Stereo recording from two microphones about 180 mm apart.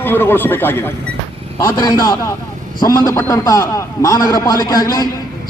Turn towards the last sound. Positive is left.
turn(degrees=20)  # may be behind; listen again after turning